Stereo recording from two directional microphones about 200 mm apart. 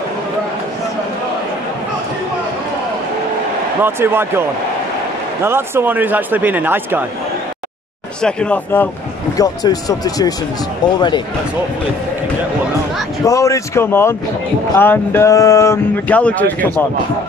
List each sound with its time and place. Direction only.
3.8 s speech: 10° right (ahead or behind)
8.2 s speech: 5° left (ahead or behind)
9.4 s speech: 20° left (ahead or behind)
13.2 s speech: 15° left (ahead or behind)